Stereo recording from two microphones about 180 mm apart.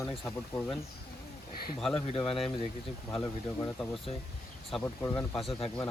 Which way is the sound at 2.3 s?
30° left (ahead or behind).